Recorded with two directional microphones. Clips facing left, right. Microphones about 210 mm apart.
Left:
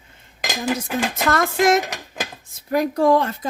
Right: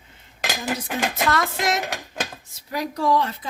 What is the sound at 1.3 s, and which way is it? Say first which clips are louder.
A woman's voice: left 6 dB; 50° left (ahead or behind).